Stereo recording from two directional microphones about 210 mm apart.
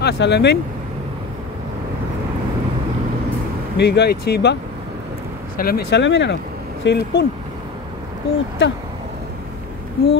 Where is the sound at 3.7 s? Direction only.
55° left (ahead or behind).